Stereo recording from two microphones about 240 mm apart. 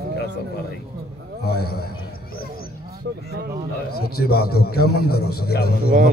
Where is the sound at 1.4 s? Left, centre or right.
Left.